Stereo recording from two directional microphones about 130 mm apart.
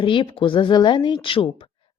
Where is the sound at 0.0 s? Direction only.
40° left (ahead or behind).